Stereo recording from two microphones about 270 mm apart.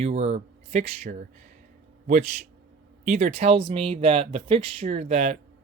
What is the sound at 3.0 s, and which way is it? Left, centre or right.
Speech, right.